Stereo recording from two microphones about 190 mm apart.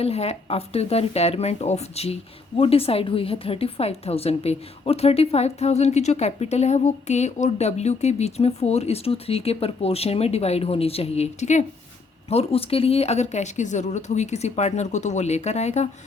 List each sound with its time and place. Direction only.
0.0 s a woman's voice: 30° left (ahead or behind)